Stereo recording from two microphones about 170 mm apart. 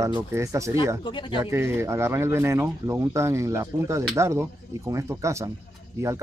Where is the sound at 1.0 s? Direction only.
30° left (ahead or behind).